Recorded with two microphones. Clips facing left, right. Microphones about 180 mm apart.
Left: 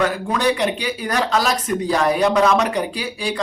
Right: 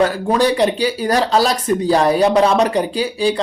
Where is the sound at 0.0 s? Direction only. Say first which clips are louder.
Right 4 dB; 35° right (ahead or behind).